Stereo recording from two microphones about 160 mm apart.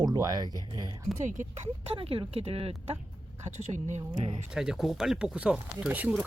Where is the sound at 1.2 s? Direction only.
50° right (ahead or behind).